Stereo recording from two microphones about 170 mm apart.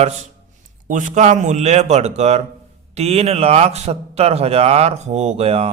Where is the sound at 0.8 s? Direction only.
50° right (ahead or behind).